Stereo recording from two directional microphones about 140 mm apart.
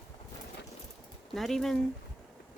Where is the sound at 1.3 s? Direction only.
Centre (ahead or behind).